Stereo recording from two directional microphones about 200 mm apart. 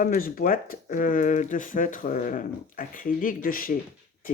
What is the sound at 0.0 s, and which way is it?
Speech, 45° left (ahead or behind).